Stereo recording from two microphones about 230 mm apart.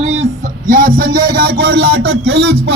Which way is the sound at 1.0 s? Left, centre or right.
Right.